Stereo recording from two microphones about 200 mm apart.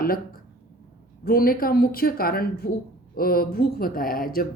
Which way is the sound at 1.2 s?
50° left (ahead or behind).